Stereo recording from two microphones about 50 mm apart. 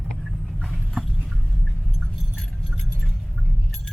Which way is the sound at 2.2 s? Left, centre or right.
Centre.